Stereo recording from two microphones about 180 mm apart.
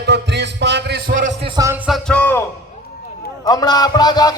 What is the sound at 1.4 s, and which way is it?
Music, 20° right (ahead or behind).